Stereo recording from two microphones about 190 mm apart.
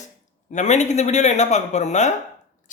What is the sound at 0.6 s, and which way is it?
Speech, 35° left (ahead or behind).